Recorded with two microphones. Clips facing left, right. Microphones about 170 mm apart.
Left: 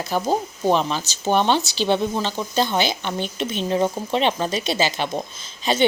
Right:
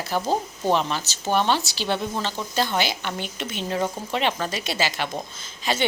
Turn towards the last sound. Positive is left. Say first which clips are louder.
# left 4 dB
turn(degrees=20)  # may be behind; listen again after turning